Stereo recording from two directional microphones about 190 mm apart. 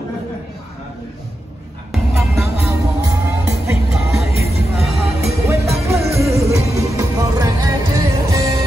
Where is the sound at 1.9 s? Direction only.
Centre (ahead or behind).